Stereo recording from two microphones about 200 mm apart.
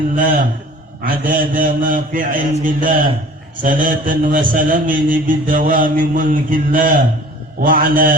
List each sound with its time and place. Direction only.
0.2 s a man's voice: 40° right (ahead or behind)